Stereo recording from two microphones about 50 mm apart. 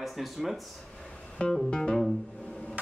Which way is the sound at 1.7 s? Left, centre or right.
Centre.